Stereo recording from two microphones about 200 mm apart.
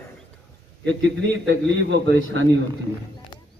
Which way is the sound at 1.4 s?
65° right (ahead or behind).